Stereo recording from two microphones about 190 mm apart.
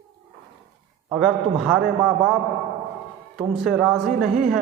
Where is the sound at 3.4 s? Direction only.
Centre (ahead or behind).